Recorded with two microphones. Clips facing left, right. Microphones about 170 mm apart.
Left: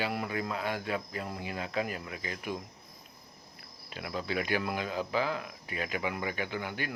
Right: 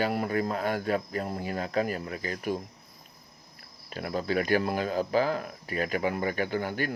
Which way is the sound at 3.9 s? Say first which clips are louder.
Right 6 dB; 45° right (ahead or behind).